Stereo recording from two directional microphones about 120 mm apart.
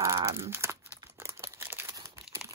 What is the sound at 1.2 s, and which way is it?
Crumpling, 20° right (ahead or behind).